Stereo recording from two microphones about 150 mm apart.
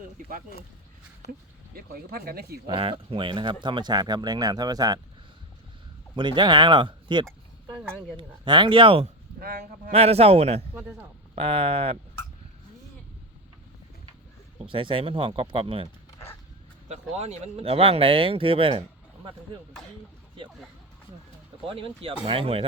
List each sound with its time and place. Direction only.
1.3 s speech: 80° right
2.6 s speech: 35° right (ahead or behind)
6.1 s speech: 30° right (ahead or behind)
9.4 s speech: 85° right
9.9 s speech: 45° right (ahead or behind)
14.6 s speech: 35° right (ahead or behind)
16.9 s speech: 45° right (ahead or behind)
21.7 s speech: 35° right (ahead or behind)